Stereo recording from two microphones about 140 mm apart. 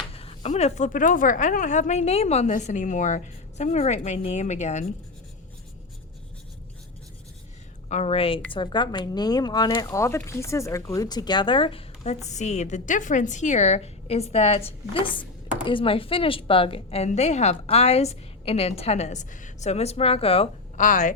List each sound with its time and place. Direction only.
0.1 s a woman's voice: 45° left (ahead or behind)
7.9 s a woman's voice: 50° left (ahead or behind)
20.7 s a woman's voice: 65° left (ahead or behind)